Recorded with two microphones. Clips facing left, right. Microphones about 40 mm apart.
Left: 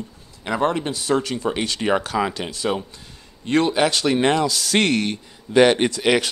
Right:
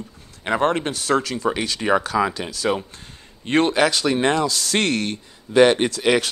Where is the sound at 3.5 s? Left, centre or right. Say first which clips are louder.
Even; right.